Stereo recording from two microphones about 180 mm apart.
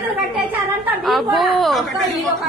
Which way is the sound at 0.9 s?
Centre (ahead or behind).